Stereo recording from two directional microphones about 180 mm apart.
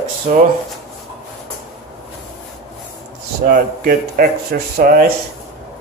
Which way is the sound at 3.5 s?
55° right (ahead or behind).